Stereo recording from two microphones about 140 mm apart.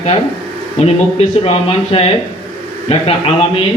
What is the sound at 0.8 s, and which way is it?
A man's voice, 50° left (ahead or behind).